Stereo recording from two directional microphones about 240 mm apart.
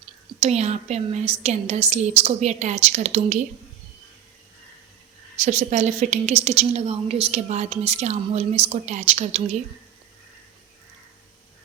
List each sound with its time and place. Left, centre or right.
0.3 s a woman's voice: right
5.4 s a woman's voice: right